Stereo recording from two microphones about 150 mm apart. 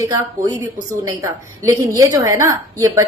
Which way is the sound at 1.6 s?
20° right (ahead or behind).